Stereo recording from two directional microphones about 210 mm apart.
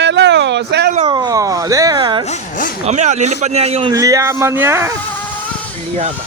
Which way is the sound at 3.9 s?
15° right (ahead or behind).